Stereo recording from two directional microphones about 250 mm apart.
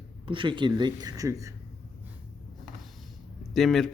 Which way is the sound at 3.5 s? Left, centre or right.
Centre.